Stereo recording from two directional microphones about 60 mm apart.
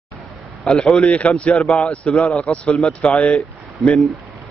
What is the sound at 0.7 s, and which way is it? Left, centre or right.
A man's voice, centre.